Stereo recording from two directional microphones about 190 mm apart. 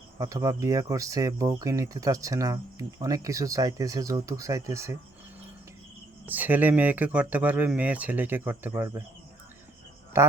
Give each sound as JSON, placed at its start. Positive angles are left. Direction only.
{"t": 0.2, "sound": "speech", "side_deg": -15}
{"t": 6.2, "sound": "speech", "side_deg": -10}